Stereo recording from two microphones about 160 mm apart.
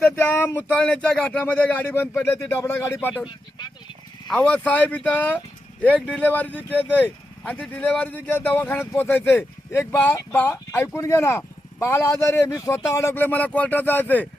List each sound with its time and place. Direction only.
0.2 s speech: 10° left (ahead or behind)
3.2 s speech: 30° left (ahead or behind)
4.3 s speech: 5° left (ahead or behind)